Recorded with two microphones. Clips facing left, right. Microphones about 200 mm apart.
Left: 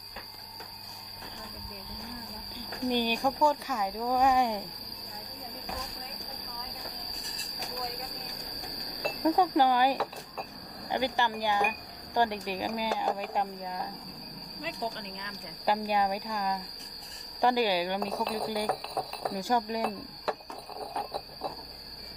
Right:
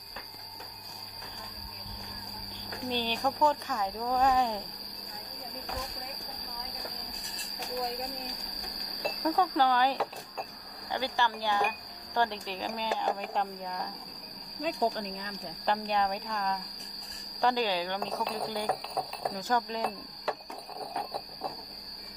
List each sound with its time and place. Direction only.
2.9 s speech: 15° left (ahead or behind)
8.1 s a sound: centre (ahead or behind)
9.2 s speech: 15° left (ahead or behind)
14.6 s speech: 50° right (ahead or behind)
15.6 s speech: 10° left (ahead or behind)
19.4 s speech: 15° left (ahead or behind)